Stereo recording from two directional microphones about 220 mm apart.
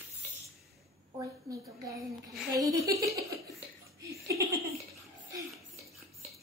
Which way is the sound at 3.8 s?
15° right (ahead or behind).